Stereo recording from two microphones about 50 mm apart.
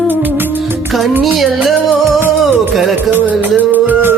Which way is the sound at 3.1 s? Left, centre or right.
Right.